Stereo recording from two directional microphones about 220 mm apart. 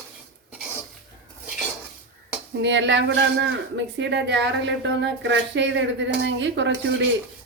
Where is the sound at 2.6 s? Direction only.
55° right (ahead or behind).